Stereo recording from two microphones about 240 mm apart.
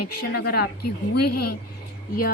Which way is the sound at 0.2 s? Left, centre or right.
Left.